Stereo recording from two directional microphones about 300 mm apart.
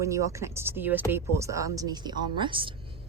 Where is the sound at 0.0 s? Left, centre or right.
Centre.